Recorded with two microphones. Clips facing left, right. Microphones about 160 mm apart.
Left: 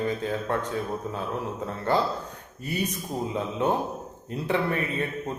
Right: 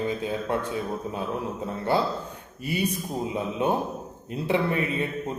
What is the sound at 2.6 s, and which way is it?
A man's voice, 10° right (ahead or behind).